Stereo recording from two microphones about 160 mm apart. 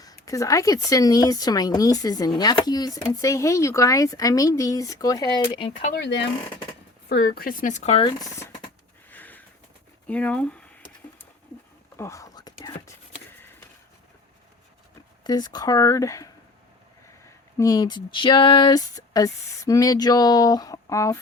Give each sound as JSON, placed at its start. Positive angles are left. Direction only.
{"t": 0.0, "sound": "speech", "side_deg": 20}
{"t": 7.1, "sound": "speech", "side_deg": 70}
{"t": 8.0, "sound": "speech", "side_deg": 20}
{"t": 9.0, "sound": "a sound", "side_deg": 10}
{"t": 10.1, "sound": "speech", "side_deg": 10}
{"t": 11.9, "sound": "whispering", "side_deg": 20}
{"t": 15.2, "sound": "speech", "side_deg": 25}